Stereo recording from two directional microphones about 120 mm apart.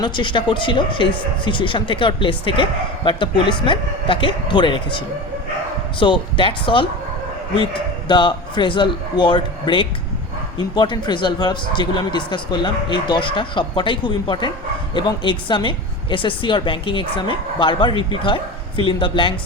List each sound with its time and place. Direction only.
0.0 s a woman's voice: 40° left (ahead or behind)